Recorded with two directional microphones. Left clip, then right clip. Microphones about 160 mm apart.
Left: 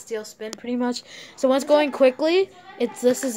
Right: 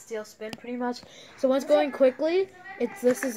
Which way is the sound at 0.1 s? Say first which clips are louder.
Left 4 dB; 15° left (ahead or behind).